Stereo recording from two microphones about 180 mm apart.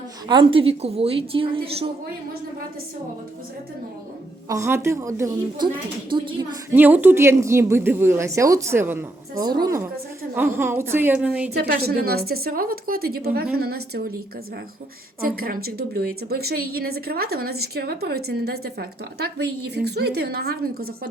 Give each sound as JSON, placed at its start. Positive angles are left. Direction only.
{"t": 0.3, "sound": "a woman's voice", "side_deg": -30}
{"t": 4.4, "sound": "a woman's voice", "side_deg": -15}
{"t": 6.1, "sound": "a woman's voice", "side_deg": -25}
{"t": 6.7, "sound": "a woman's voice", "side_deg": -10}
{"t": 9.4, "sound": "a woman's voice", "side_deg": -20}
{"t": 11.5, "sound": "a woman's voice", "side_deg": -60}
{"t": 15.2, "sound": "a woman's voice", "side_deg": -55}